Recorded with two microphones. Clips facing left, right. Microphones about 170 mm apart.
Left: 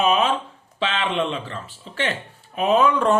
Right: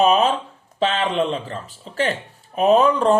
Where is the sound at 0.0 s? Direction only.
40° right (ahead or behind).